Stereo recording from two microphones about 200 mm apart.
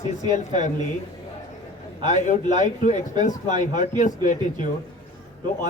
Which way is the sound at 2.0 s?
35° left (ahead or behind).